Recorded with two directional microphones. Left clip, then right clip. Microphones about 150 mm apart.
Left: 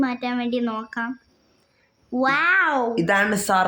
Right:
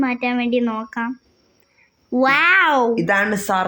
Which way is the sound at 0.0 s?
15° right (ahead or behind).